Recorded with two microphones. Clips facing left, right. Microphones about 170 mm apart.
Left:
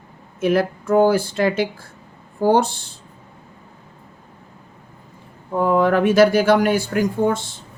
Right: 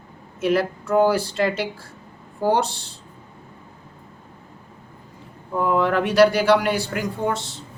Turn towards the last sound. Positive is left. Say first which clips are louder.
# left 5 dB
turn(degrees=50)  # may be behind; listen again after turning